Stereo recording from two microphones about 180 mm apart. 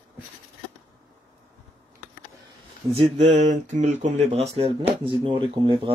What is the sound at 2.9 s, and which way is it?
Speech, 35° right (ahead or behind).